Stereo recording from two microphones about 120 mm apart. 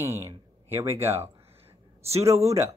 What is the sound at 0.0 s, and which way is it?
Speech, 25° right (ahead or behind).